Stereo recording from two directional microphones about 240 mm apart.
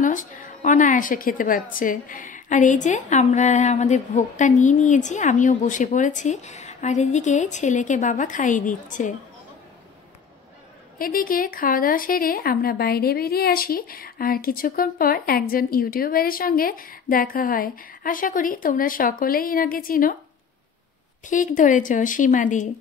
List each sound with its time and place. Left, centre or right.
0.0 s speech: left
11.0 s speech: left
21.3 s speech: left